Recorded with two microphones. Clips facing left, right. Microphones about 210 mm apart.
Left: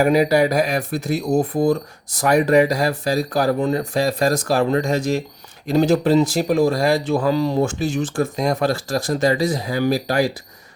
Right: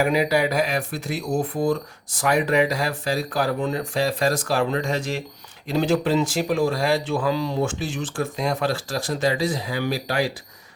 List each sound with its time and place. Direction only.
0.0 s speech: 40° left (ahead or behind)